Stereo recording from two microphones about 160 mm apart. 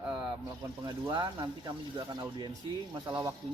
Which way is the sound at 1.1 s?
30° right (ahead or behind).